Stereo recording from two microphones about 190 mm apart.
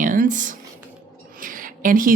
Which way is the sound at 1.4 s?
45° right (ahead or behind).